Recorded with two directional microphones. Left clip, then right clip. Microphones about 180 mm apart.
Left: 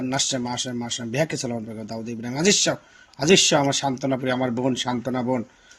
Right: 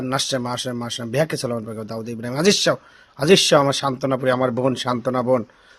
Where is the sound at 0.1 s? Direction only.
50° right (ahead or behind).